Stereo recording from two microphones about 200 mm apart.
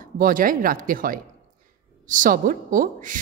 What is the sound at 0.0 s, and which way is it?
A woman's voice, 45° right (ahead or behind).